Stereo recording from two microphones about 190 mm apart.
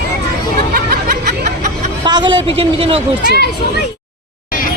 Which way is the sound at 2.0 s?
25° right (ahead or behind).